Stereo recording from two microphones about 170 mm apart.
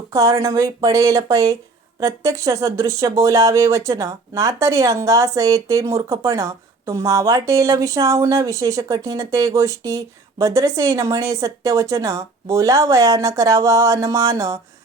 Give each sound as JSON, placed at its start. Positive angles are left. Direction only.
{"t": 0.1, "sound": "speech", "side_deg": -15}